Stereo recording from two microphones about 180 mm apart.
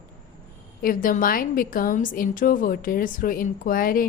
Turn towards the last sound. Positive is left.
turn(degrees=50)  # may be behind; listen again after turning